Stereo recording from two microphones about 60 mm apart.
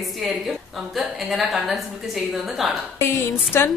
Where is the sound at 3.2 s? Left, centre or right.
Left.